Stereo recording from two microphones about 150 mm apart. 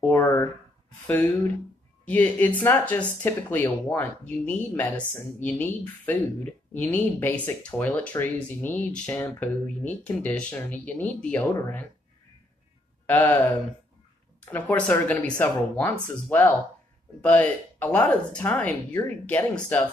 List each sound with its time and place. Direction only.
0.0 s speech: 15° left (ahead or behind)
11.5 s speech: 20° left (ahead or behind)
13.0 s a sound: 10° left (ahead or behind)
14.4 s speech: 10° left (ahead or behind)